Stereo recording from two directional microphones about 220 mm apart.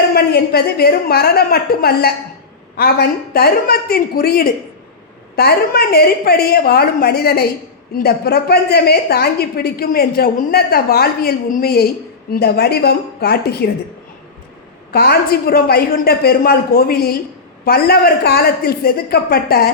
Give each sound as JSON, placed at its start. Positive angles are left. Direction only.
{"t": 0.1, "sound": "a woman's voice", "side_deg": 45}
{"t": 14.9, "sound": "a woman's voice", "side_deg": 45}